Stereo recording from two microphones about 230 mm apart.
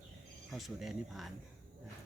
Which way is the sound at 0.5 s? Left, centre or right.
Centre.